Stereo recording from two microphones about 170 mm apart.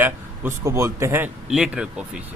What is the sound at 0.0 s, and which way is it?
A man's voice, 15° right (ahead or behind).